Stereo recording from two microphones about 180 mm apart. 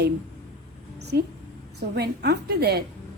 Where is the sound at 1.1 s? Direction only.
60° right (ahead or behind).